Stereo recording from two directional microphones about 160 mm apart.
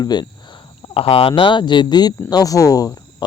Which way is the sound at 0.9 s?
35° left (ahead or behind).